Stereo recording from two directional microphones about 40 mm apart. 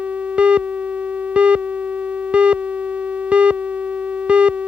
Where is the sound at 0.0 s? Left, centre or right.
Right.